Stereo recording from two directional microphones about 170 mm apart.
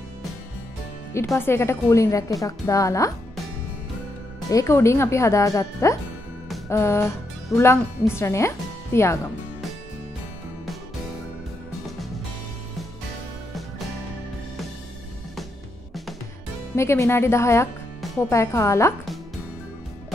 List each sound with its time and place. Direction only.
1.4 s a woman's voice: 15° left (ahead or behind)
4.5 s a woman's voice: 20° left (ahead or behind)
16.7 s a woman's voice: 15° left (ahead or behind)